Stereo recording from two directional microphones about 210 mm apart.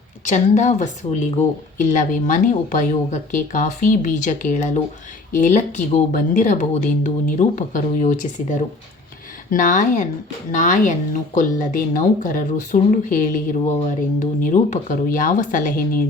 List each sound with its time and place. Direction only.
0.3 s speech: 35° left (ahead or behind)